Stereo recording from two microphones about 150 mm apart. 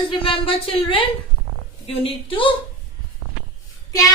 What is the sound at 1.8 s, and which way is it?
Speech, 35° left (ahead or behind).